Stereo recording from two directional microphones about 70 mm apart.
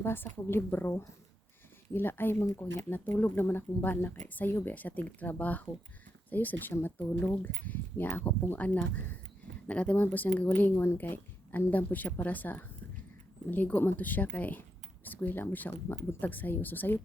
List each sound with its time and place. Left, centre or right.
0.0 s a woman's voice: left